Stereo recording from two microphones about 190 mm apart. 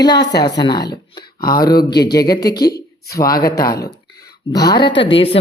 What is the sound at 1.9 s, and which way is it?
Speech, 60° left (ahead or behind).